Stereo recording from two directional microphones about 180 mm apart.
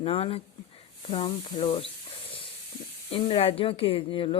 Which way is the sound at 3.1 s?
30° left (ahead or behind).